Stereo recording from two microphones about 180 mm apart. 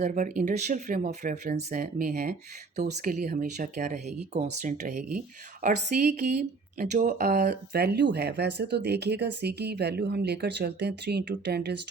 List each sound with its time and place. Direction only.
0.0 s speech: 45° right (ahead or behind)
5.6 s speech: 65° right (ahead or behind)
6.7 s speech: 45° right (ahead or behind)
7.3 s speech: 65° right (ahead or behind)